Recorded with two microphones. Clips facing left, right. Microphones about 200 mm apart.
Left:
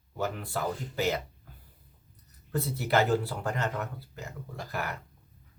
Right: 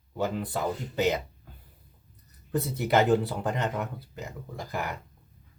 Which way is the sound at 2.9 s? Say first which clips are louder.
Right 3 dB; 15° right (ahead or behind).